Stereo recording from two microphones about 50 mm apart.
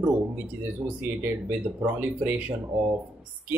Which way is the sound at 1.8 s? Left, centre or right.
Right.